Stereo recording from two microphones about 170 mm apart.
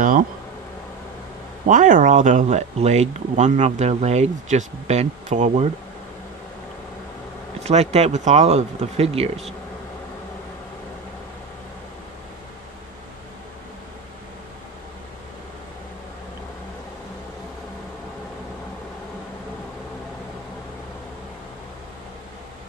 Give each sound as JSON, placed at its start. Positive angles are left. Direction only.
{"t": 1.7, "sound": "speech", "side_deg": -50}
{"t": 7.6, "sound": "speech", "side_deg": -40}